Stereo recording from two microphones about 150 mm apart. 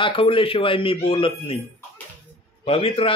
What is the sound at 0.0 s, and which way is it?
A man's voice, 35° left (ahead or behind).